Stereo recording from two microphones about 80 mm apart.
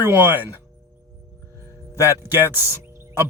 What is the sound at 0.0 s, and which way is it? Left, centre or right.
Speech, right.